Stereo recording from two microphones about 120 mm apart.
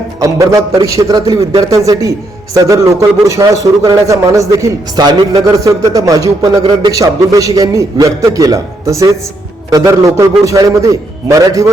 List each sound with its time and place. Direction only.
0.2 s a man's voice: 25° right (ahead or behind)
6.6 s a man's voice: 45° right (ahead or behind)
6.9 s a man's voice: 30° right (ahead or behind)